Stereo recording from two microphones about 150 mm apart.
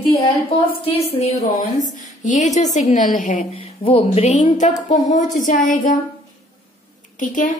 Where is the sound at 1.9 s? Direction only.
55° left (ahead or behind).